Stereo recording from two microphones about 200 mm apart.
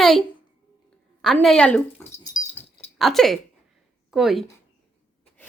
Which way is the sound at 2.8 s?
Centre (ahead or behind).